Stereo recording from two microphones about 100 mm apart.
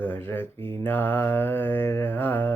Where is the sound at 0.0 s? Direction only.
20° left (ahead or behind).